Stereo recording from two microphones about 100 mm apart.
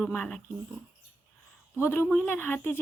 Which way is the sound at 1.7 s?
25° left (ahead or behind).